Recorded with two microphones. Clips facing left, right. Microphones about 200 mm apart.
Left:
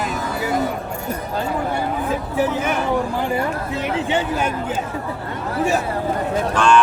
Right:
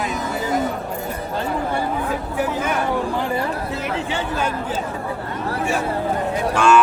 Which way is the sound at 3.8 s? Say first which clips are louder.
Left 3 dB; 25° left (ahead or behind).